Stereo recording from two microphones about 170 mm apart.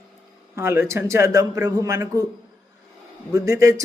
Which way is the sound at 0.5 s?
15° right (ahead or behind).